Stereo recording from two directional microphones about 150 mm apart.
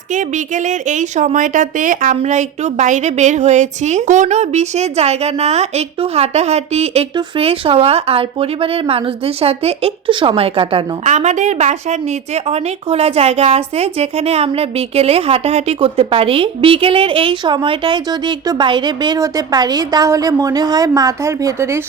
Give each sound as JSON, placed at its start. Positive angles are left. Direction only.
{"t": 0.1, "sound": "a woman's voice", "side_deg": -55}
{"t": 11.0, "sound": "speech", "side_deg": -50}